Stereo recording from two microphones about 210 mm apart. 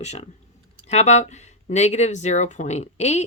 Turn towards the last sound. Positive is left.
turn(degrees=30)  # may be behind; listen again after turning